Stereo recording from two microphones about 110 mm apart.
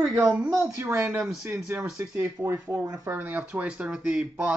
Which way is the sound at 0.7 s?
25° right (ahead or behind).